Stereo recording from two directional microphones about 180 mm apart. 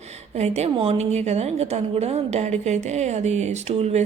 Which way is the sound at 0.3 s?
35° right (ahead or behind).